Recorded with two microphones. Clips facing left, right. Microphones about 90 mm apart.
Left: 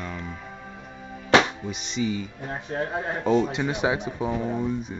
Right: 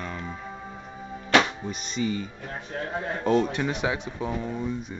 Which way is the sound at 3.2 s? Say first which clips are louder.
Left 1 dB; 10° left (ahead or behind).